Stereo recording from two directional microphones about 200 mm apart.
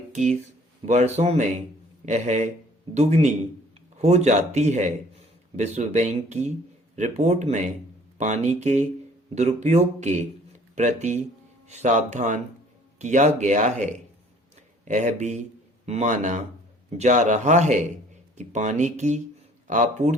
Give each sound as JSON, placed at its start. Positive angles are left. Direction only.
{"t": 0.1, "sound": "a man's voice", "side_deg": -35}
{"t": 14.8, "sound": "a man's voice", "side_deg": -40}